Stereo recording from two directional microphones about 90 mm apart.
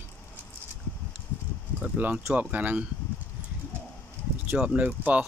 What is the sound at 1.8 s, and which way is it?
Speech, 15° right (ahead or behind).